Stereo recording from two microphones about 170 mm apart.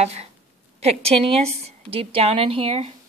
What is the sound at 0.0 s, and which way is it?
A woman's voice, 40° right (ahead or behind).